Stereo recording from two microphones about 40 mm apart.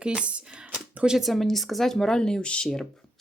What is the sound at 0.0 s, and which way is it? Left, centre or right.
Speech, right.